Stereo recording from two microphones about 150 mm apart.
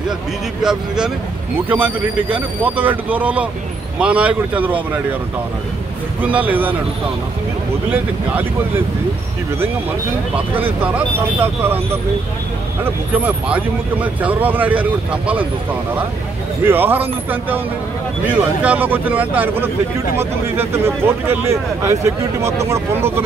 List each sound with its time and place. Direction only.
0.6 s speech: 5° right (ahead or behind)
2.3 s speech: 10° right (ahead or behind)
6.2 s speech: 10° right (ahead or behind)
7.9 s speech: 15° right (ahead or behind)
10.5 s speech: 10° right (ahead or behind)
16.6 s speech: 15° right (ahead or behind)
18.2 s speech: 10° right (ahead or behind)